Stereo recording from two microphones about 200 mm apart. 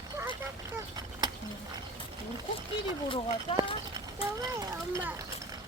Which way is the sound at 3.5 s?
25° left (ahead or behind).